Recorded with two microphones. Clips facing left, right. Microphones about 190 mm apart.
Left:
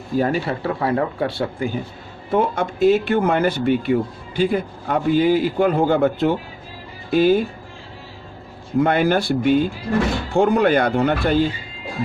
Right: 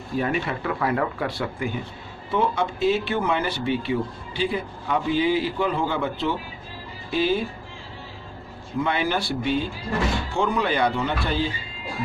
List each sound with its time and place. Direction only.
0.2 s speech: 35° left (ahead or behind)
2.3 s a man's voice: 45° left (ahead or behind)
8.8 s a man's voice: 50° left (ahead or behind)